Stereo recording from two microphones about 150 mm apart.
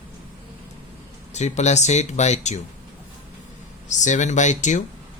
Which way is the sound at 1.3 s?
50° left (ahead or behind).